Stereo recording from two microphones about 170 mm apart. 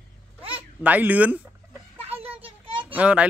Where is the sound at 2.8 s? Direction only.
10° right (ahead or behind).